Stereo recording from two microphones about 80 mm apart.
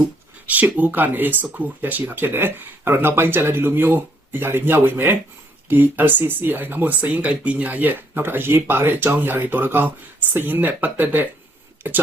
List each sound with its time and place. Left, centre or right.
0.4 s speech: centre